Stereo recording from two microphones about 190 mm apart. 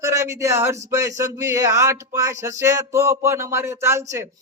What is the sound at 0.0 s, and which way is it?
A man's voice, 15° right (ahead or behind).